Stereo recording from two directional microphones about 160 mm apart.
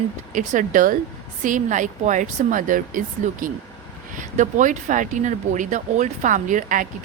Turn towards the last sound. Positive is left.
turn(degrees=-55)  # may be behind; listen again after turning